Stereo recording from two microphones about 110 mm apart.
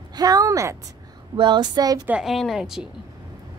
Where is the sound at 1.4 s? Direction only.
45° right (ahead or behind).